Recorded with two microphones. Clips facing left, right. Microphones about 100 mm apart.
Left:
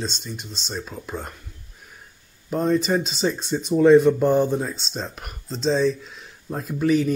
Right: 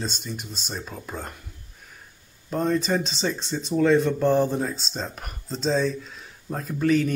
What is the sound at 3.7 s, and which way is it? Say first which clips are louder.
Speech: left 6 dB; 20° left (ahead or behind).